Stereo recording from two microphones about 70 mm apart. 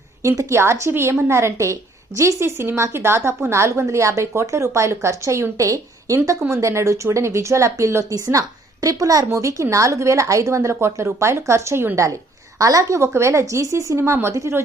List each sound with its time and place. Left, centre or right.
0.2 s a woman's voice: right
12.5 s a woman's voice: right